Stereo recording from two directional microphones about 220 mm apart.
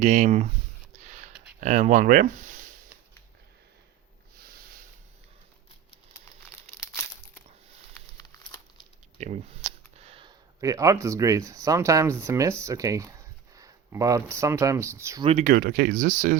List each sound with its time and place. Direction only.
0.0 s speech: 35° right (ahead or behind)
0.9 s a sound: 35° right (ahead or behind)
1.6 s speech: 35° right (ahead or behind)
4.4 s a sound: 45° right (ahead or behind)
9.1 s speech: 30° right (ahead or behind); by 15.3 s 15° right (ahead or behind)
15.3 s speech: 35° right (ahead or behind)